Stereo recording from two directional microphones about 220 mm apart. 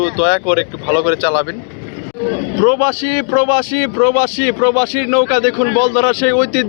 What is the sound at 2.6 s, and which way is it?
A man's voice, 35° left (ahead or behind).